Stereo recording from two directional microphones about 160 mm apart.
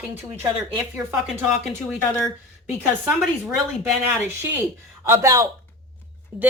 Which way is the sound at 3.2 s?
5° right (ahead or behind).